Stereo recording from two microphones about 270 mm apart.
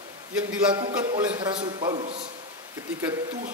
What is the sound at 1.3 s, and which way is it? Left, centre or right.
Speech, centre.